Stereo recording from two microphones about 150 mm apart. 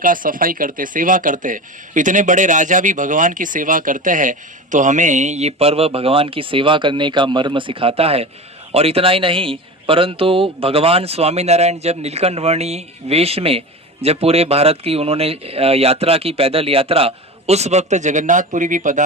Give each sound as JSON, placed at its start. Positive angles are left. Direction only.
{"t": 0.0, "sound": "a man's voice", "side_deg": -65}